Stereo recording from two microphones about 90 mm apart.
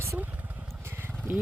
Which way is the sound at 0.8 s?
25° right (ahead or behind).